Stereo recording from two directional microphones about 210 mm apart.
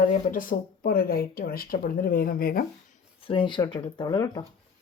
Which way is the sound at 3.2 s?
25° left (ahead or behind).